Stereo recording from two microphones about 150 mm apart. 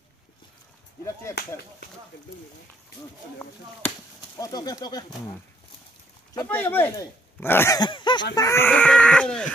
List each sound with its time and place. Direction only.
1.3 s speech: 20° left (ahead or behind)
4.4 s speech: 25° left (ahead or behind)
6.3 s speech: 15° left (ahead or behind)
7.7 s a sound: 30° left (ahead or behind)
8.4 s speech: 20° left (ahead or behind)